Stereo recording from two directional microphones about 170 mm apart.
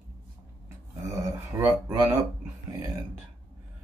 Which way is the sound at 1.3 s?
20° right (ahead or behind).